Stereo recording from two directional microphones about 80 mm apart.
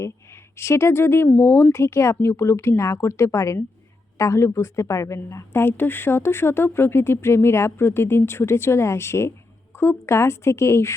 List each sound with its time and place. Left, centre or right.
0.5 s speech: left
5.6 s speech: left